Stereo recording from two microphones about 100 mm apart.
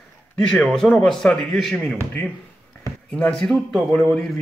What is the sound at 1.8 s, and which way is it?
Speech, 15° left (ahead or behind).